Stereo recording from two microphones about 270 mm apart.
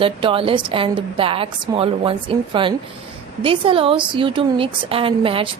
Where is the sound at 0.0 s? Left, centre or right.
Centre.